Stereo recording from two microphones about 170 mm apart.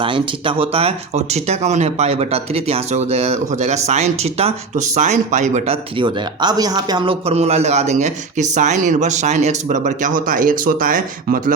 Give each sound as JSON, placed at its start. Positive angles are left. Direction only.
{"t": 0.0, "sound": "speech", "side_deg": -30}